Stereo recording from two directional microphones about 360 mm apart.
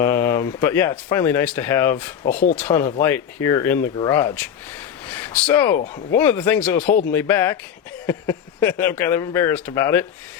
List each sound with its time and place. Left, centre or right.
0.0 s speech: centre